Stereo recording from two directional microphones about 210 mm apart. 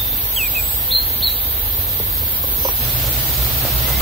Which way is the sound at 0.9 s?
25° left (ahead or behind).